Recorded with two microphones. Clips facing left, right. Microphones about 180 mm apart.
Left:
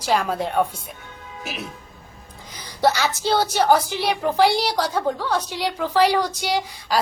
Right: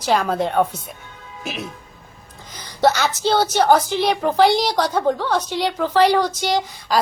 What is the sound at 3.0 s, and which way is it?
A woman's voice, 10° left (ahead or behind).